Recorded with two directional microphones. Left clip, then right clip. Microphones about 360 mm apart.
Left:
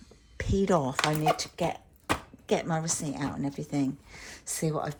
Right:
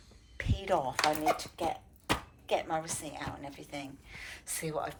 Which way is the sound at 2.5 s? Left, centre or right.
Centre.